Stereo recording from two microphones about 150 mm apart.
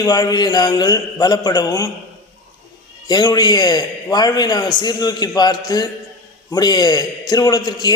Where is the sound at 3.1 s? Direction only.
25° left (ahead or behind).